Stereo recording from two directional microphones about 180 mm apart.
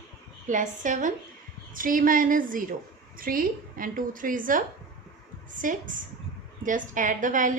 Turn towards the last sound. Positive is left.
turn(degrees=-45)  # may be behind; listen again after turning